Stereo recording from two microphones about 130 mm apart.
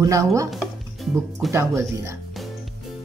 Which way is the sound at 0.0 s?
25° right (ahead or behind).